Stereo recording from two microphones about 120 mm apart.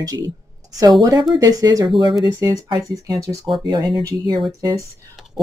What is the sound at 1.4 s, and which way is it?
Speech, 30° right (ahead or behind).